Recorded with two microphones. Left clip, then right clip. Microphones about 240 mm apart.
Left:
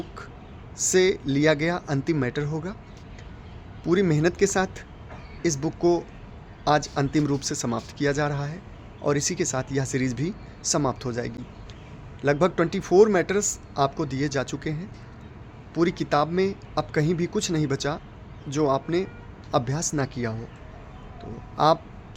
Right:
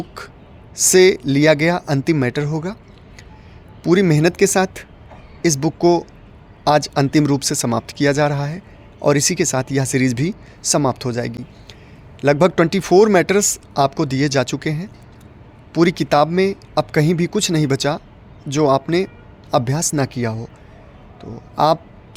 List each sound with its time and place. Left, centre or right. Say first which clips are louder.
0.2 s speech: right 6 dB; right
3.8 s speech: right 7 dB; right